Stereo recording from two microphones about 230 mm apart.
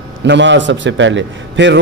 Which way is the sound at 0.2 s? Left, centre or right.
Right.